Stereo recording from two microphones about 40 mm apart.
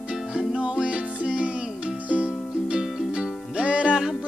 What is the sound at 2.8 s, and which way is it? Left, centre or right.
Music, centre.